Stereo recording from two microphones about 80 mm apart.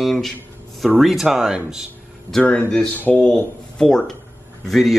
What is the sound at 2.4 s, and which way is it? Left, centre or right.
Speech, centre.